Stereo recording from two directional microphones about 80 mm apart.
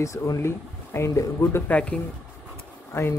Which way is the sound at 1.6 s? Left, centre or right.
Centre.